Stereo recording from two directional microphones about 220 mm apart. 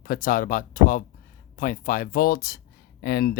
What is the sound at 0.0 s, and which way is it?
Speech, 40° left (ahead or behind).